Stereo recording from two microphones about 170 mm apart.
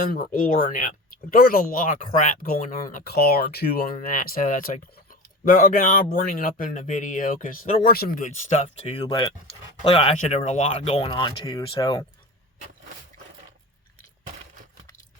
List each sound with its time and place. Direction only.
0.0 s speech: 55° left (ahead or behind); by 12.0 s 25° left (ahead or behind)